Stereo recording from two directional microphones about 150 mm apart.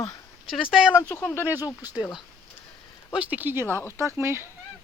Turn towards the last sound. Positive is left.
turn(degrees=-15)  # may be behind; listen again after turning